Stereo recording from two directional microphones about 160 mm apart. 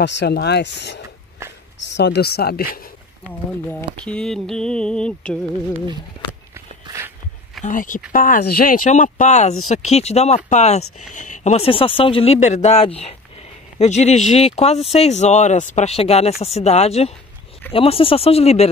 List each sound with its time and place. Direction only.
0.0 s speech: 90° left; by 2.8 s 70° left (ahead or behind)
3.6 s a sound: 5° left (ahead or behind)
7.6 s speech: 55° left (ahead or behind)